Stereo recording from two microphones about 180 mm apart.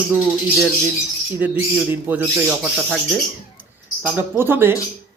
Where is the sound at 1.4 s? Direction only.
10° right (ahead or behind).